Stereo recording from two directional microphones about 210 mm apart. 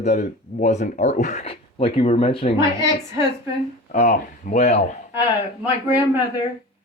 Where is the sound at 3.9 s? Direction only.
35° left (ahead or behind).